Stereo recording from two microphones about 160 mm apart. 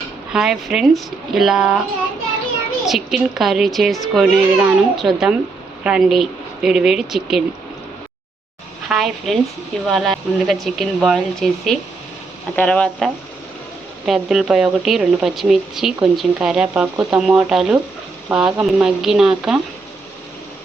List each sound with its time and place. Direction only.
0.3 s speech: 5° right (ahead or behind)
2.8 s speech: centre (ahead or behind)
8.9 s speech: centre (ahead or behind)